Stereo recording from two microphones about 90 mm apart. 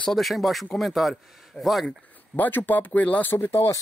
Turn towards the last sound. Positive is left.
turn(degrees=30)  # may be behind; listen again after turning